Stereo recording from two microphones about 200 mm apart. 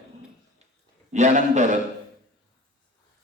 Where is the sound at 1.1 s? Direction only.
35° right (ahead or behind).